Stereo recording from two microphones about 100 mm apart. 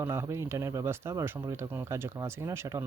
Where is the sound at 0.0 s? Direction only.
30° right (ahead or behind).